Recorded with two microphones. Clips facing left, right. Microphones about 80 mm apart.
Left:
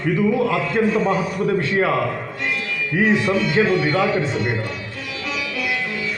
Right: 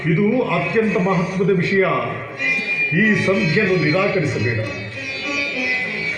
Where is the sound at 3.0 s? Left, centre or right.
Left.